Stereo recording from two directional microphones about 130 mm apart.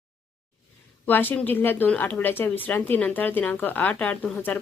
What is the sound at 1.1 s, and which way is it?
Speech, 15° left (ahead or behind).